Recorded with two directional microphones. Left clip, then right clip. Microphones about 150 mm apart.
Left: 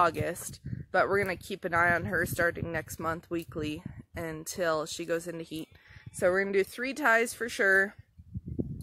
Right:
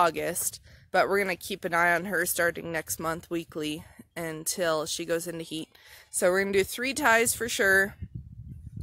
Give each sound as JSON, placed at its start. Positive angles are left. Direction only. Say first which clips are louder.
{"t": 0.0, "sound": "speech", "louder": "right 2 dB", "side_deg": -25}